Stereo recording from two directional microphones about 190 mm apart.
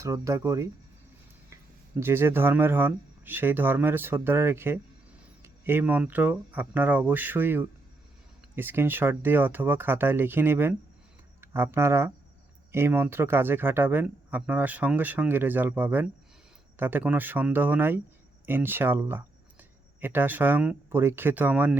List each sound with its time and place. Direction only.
0.0 s speech: 15° right (ahead or behind)
2.0 s speech: 10° right (ahead or behind)